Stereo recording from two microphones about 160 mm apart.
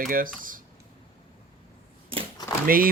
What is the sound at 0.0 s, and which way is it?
Speech, 60° right (ahead or behind).